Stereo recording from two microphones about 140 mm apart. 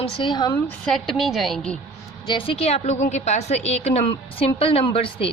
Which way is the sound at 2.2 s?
35° left (ahead or behind).